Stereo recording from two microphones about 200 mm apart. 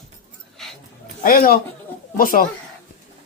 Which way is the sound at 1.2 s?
45° left (ahead or behind).